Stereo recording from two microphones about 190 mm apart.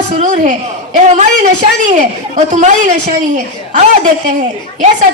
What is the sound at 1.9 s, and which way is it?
Speech, 40° right (ahead or behind).